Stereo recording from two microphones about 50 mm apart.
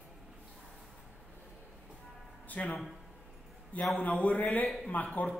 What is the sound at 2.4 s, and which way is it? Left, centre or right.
Speech, left.